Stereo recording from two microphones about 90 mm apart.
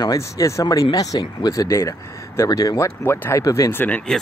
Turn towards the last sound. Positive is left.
turn(degrees=20)  # may be behind; listen again after turning